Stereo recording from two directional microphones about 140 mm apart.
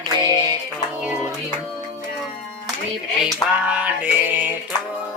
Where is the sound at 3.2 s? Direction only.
10° right (ahead or behind).